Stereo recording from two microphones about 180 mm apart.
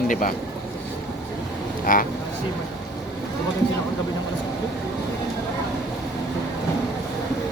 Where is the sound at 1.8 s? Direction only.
50° left (ahead or behind).